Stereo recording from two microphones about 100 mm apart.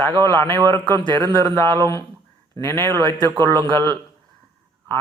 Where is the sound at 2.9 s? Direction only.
45° right (ahead or behind).